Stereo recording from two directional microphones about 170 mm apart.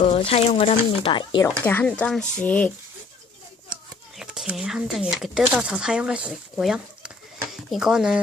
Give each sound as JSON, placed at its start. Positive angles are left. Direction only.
{"t": 0.0, "sound": "speech", "side_deg": 35}
{"t": 1.6, "sound": "speech", "side_deg": 10}
{"t": 4.2, "sound": "speech", "side_deg": -5}